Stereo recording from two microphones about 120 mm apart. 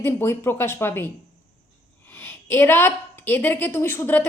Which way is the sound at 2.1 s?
20° left (ahead or behind).